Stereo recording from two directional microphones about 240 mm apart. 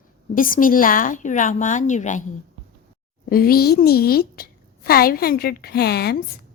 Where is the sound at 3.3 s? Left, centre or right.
Left.